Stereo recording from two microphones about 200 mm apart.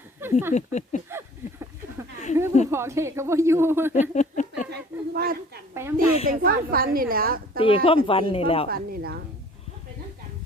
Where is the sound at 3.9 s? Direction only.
35° left (ahead or behind).